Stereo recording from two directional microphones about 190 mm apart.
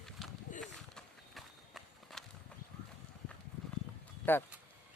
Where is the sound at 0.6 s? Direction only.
Centre (ahead or behind).